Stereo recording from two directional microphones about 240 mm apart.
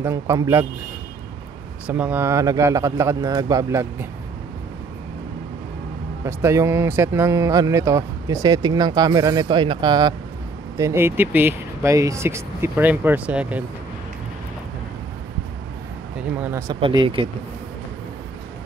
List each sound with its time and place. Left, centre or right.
0.0 s speech: centre
1.9 s speech: centre
6.2 s speech: centre
16.2 s speech: centre